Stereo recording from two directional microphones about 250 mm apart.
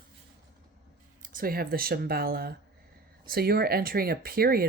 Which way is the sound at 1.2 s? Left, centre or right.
Right.